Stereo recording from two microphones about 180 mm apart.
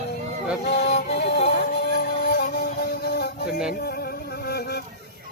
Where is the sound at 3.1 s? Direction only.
60° left (ahead or behind).